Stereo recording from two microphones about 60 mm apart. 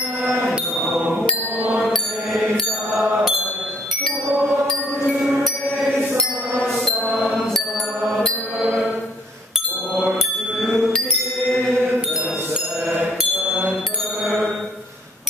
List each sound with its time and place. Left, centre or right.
0.4 s a sound: centre
1.9 s mantra: centre
3.0 s mantra: centre
6.6 s music: centre
10.6 s bicycle bell: centre